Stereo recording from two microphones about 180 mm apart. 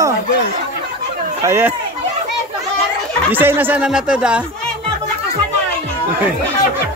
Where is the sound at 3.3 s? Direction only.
10° right (ahead or behind).